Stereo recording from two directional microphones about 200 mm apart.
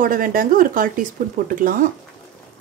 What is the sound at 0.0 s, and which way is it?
Speech, 45° right (ahead or behind).